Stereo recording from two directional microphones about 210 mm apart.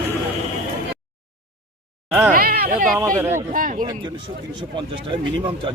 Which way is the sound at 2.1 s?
10° right (ahead or behind).